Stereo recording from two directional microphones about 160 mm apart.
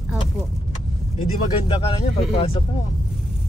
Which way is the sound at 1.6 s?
35° left (ahead or behind).